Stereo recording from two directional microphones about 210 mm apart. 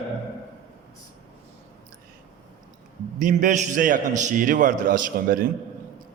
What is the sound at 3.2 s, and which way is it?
A man's voice, 40° right (ahead or behind).